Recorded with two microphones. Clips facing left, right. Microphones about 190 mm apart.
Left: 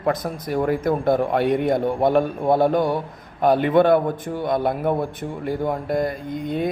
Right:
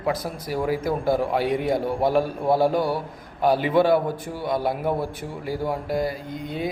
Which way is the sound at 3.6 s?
55° left (ahead or behind).